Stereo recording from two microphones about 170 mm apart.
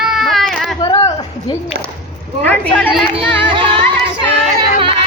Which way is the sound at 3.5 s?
30° right (ahead or behind).